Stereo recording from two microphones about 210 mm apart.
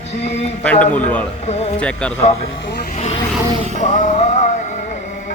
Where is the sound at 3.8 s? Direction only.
30° left (ahead or behind).